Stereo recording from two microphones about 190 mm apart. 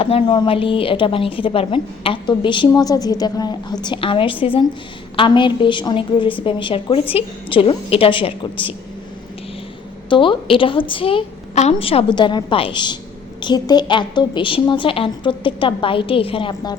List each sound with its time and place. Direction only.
0.0 s a woman's voice: 30° left (ahead or behind)
10.1 s a woman's voice: 25° left (ahead or behind)